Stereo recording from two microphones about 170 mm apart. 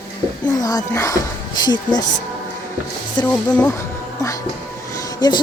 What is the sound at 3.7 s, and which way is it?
Music, 20° left (ahead or behind).